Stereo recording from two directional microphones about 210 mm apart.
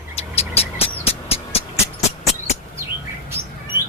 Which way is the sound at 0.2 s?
30° left (ahead or behind).